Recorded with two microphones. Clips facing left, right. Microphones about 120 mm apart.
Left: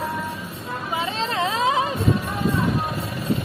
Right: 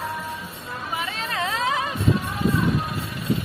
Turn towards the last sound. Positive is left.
turn(degrees=20)  # may be behind; listen again after turning